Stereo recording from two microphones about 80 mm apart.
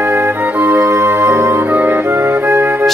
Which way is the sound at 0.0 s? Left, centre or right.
Right.